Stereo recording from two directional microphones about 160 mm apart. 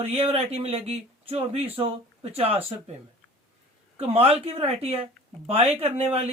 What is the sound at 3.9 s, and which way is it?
Speech, 40° right (ahead or behind).